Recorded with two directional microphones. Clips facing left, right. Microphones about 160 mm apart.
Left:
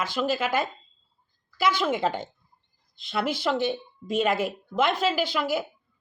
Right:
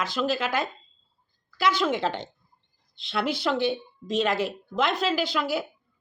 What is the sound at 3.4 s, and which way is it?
Speech, centre (ahead or behind).